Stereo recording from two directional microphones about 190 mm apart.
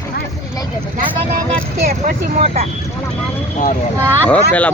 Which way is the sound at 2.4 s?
35° right (ahead or behind).